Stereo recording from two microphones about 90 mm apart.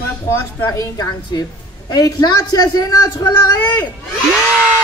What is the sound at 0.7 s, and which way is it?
A woman's voice, 50° left (ahead or behind).